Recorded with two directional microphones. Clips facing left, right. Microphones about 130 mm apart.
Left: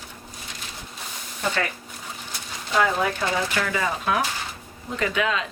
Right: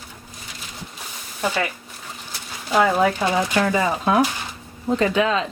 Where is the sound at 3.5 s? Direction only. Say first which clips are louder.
Right 6 dB; 30° right (ahead or behind).